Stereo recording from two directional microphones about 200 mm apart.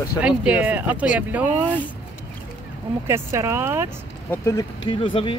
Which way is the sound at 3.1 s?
15° right (ahead or behind).